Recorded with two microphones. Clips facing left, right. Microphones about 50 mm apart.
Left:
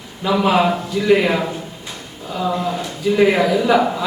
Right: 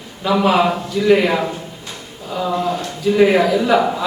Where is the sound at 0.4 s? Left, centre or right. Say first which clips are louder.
Even; centre.